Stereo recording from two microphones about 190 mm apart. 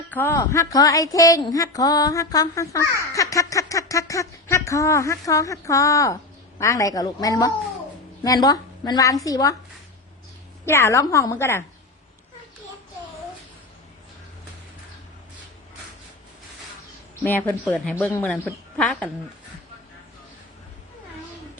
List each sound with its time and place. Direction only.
0.1 s a woman's voice: 10° left (ahead or behind)
10.7 s a woman's voice: 15° left (ahead or behind)
17.2 s a woman's voice: 10° left (ahead or behind)